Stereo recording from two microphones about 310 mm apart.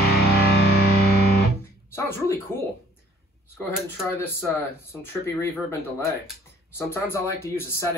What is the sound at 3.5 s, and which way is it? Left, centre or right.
Speech, centre.